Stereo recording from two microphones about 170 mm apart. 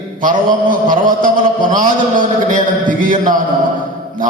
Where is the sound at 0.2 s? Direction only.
50° right (ahead or behind).